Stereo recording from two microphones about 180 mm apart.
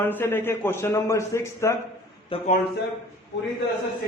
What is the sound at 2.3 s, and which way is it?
Speech, 30° left (ahead or behind).